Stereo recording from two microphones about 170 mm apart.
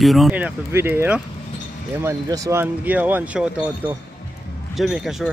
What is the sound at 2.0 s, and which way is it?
Speech, 15° right (ahead or behind).